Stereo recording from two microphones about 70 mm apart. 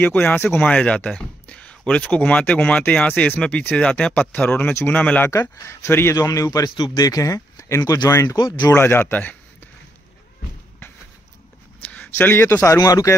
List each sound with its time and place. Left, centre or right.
0.0 s speech: left
5.3 s speech: left
6.1 s speech: left
8.7 s speech: left
11.8 s speech: left
12.7 s speech: left